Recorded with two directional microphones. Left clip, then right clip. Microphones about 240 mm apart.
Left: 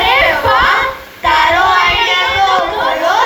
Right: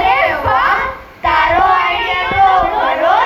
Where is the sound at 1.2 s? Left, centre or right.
Left.